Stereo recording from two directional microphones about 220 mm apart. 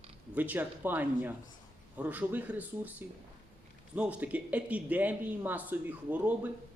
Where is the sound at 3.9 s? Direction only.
5° right (ahead or behind).